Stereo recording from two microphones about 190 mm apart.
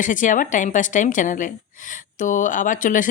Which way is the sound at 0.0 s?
45° left (ahead or behind).